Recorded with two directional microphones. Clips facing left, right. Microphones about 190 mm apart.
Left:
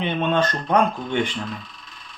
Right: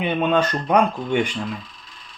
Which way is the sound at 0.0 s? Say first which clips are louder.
Right 2 dB; 10° right (ahead or behind).